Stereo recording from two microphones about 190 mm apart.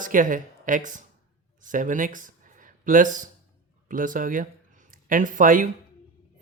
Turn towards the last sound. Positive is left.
turn(degrees=-45)  # may be behind; listen again after turning